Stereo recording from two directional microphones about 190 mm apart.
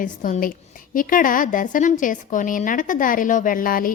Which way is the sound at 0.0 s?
45° left (ahead or behind).